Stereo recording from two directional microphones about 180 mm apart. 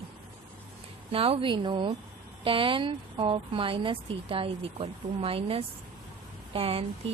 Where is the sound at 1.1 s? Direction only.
30° right (ahead or behind).